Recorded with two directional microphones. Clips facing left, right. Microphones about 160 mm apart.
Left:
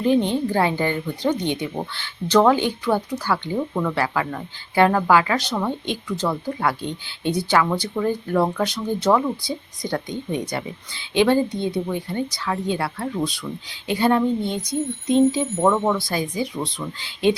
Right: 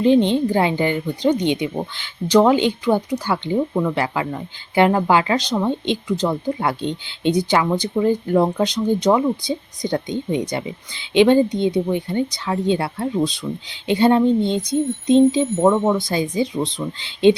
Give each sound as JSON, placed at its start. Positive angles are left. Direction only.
{"t": 0.0, "sound": "speech", "side_deg": -20}